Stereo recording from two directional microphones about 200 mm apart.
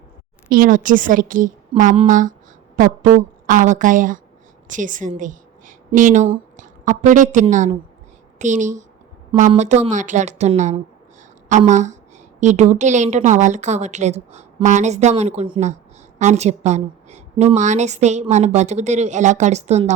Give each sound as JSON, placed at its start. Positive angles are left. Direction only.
{"t": 0.5, "sound": "a woman's voice", "side_deg": -45}